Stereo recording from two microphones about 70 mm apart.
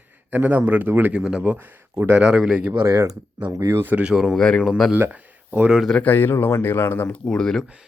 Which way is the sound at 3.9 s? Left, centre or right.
Centre.